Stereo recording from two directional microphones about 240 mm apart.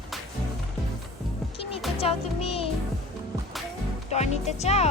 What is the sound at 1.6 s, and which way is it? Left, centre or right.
Music, left.